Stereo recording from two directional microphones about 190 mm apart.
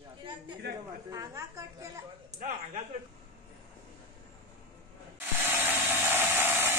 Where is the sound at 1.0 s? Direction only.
15° right (ahead or behind).